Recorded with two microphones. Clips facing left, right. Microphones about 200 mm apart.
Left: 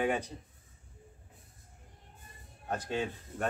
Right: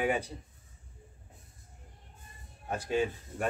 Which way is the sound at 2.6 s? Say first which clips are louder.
Right 4 dB; 10° right (ahead or behind).